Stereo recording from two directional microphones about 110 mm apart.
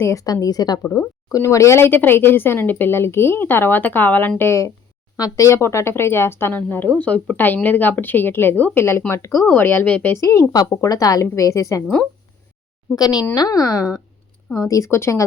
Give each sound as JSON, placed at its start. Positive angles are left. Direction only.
{"t": 0.0, "sound": "a woman's voice", "side_deg": 30}
{"t": 10.2, "sound": "speech", "side_deg": 25}
{"t": 10.5, "sound": "a woman's voice", "side_deg": 40}
{"t": 13.0, "sound": "a woman's voice", "side_deg": 40}